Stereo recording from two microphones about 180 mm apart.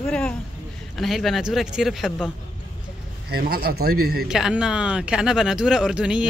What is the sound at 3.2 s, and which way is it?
A man's voice, 60° right (ahead or behind).